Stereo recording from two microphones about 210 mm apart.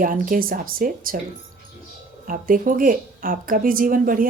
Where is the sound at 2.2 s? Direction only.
40° right (ahead or behind).